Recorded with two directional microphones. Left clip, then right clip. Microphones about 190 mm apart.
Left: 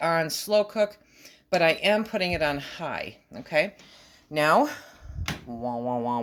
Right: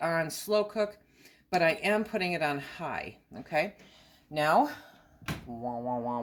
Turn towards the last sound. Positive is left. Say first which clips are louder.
# left 5 dB
turn(degrees=35)  # may be behind; listen again after turning